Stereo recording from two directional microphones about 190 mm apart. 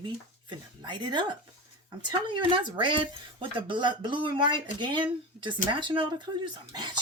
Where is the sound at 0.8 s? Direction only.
20° right (ahead or behind).